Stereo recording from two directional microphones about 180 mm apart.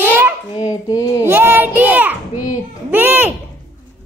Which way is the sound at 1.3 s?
10° right (ahead or behind).